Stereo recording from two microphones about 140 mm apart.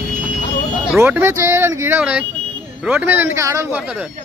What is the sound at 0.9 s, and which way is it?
Speech, 15° right (ahead or behind).